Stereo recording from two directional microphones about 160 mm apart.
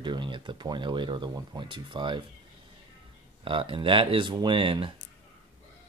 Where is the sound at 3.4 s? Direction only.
30° right (ahead or behind).